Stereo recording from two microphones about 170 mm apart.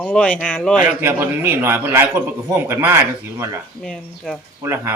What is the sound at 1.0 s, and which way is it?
Speech, 10° right (ahead or behind).